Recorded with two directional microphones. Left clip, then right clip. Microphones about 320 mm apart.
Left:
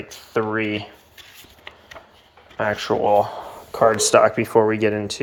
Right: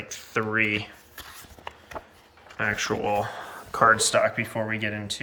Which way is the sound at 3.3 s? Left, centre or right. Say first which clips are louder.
Left 2 dB; right.